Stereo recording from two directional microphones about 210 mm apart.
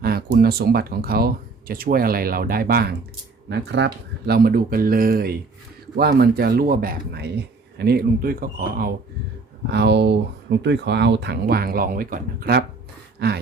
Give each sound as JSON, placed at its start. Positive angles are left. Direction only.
{"t": 0.0, "sound": "speech", "side_deg": -45}
{"t": 4.3, "sound": "speech", "side_deg": -45}
{"t": 9.6, "sound": "speech", "side_deg": -55}